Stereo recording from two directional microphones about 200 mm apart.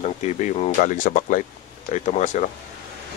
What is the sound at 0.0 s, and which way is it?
Speech, 35° left (ahead or behind).